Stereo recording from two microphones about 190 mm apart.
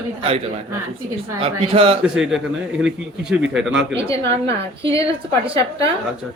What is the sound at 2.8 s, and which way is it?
Speech, 5° right (ahead or behind).